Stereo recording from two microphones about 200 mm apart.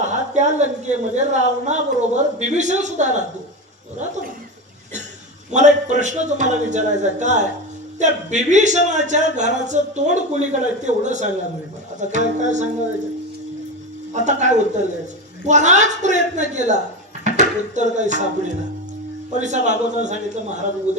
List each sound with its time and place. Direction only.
0.0 s speech: 35° right (ahead or behind)
5.5 s speech: 35° right (ahead or behind)
14.1 s speech: 35° right (ahead or behind)
17.2 s music: 35° right (ahead or behind)
19.3 s speech: 35° right (ahead or behind)